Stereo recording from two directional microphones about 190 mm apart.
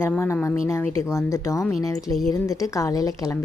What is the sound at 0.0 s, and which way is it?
A woman's voice, 10° left (ahead or behind).